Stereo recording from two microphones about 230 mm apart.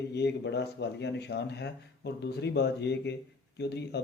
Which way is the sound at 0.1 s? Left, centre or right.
Left.